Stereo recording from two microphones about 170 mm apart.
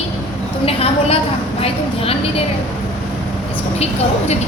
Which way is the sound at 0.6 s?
35° left (ahead or behind).